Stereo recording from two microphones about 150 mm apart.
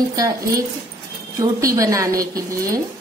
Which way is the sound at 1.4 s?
20° right (ahead or behind).